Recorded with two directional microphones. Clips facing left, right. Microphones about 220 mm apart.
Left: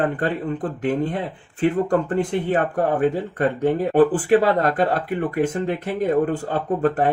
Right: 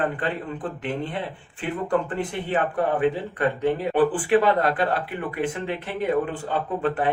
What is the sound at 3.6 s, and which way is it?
Speech, 45° left (ahead or behind).